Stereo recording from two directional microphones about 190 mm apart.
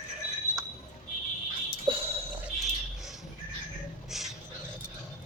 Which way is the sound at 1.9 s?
30° right (ahead or behind).